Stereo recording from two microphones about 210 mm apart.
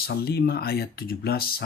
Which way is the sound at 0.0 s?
50° left (ahead or behind).